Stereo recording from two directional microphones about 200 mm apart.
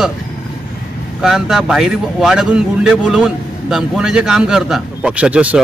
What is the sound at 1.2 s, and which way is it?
Speech, 5° right (ahead or behind).